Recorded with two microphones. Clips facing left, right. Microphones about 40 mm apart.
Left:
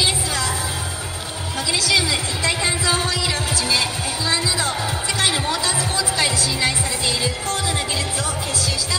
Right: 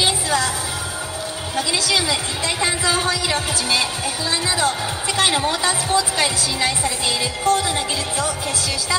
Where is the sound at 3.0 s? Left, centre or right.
Right.